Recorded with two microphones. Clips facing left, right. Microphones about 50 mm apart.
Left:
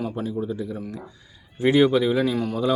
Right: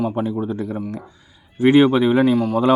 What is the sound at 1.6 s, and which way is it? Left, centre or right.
Speech, right.